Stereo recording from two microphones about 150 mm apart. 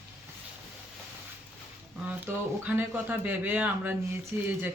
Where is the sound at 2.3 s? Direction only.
15° right (ahead or behind).